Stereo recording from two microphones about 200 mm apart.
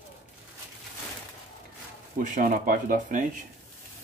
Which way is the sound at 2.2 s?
40° right (ahead or behind).